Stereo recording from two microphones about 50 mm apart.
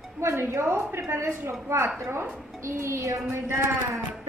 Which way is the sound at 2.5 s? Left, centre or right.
Right.